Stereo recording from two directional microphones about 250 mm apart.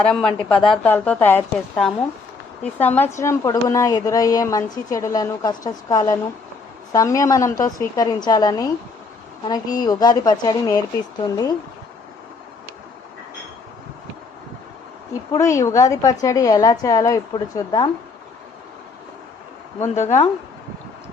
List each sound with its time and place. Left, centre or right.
0.0 s a woman's voice: centre
15.3 s a woman's voice: centre
20.0 s a woman's voice: left